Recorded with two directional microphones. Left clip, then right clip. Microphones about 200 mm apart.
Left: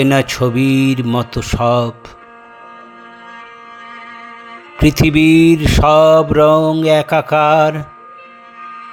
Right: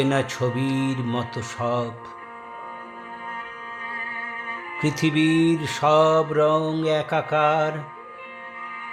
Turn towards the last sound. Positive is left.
turn(degrees=40)  # may be behind; listen again after turning